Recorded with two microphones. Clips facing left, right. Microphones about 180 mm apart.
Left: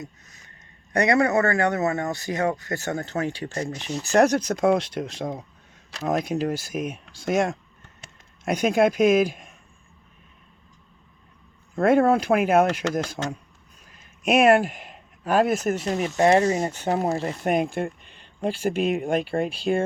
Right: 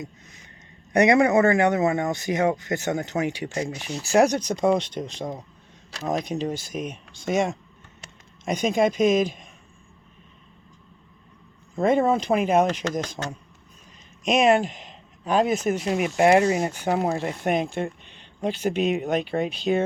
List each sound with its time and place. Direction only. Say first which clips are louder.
0.9 s speech: right 3 dB; 20° right (ahead or behind); by 9.5 s 5° left (ahead or behind)
11.7 s speech: left 2 dB; 5° left (ahead or behind)
15.9 s speech: right 1 dB; 10° right (ahead or behind)
17.5 s speech: left 2 dB; 5° left (ahead or behind)